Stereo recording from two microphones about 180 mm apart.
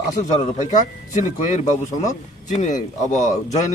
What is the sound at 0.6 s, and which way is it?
A man's voice, 40° left (ahead or behind).